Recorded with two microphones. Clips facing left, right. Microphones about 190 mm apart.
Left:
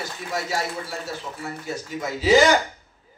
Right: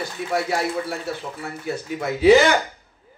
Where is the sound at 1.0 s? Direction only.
60° right (ahead or behind).